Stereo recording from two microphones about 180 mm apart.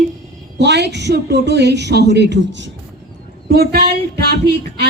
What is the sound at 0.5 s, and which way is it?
A woman's voice, 70° right (ahead or behind).